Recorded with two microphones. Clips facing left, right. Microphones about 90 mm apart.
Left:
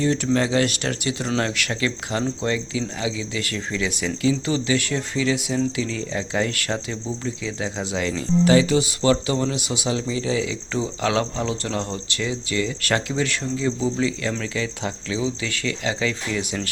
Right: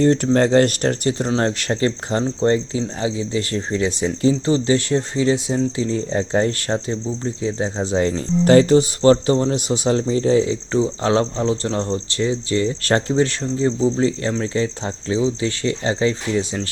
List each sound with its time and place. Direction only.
0.0 s speech: 50° right (ahead or behind); by 16.5 s 30° right (ahead or behind)